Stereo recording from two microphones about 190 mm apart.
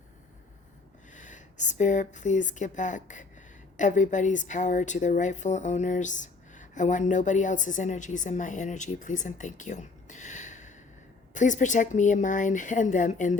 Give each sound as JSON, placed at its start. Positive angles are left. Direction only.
{"t": 1.1, "sound": "a woman's voice", "side_deg": 40}